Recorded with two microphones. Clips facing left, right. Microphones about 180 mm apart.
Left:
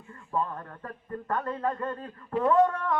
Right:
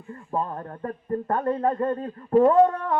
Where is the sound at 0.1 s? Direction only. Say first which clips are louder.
Right 3 dB; 35° right (ahead or behind).